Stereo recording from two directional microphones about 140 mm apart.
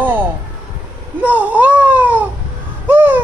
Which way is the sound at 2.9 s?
10° right (ahead or behind).